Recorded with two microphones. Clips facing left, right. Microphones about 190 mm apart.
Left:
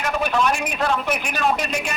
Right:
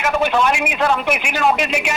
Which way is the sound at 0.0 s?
85° right.